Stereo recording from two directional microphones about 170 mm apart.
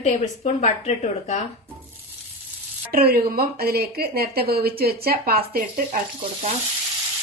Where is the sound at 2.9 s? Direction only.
60° right (ahead or behind).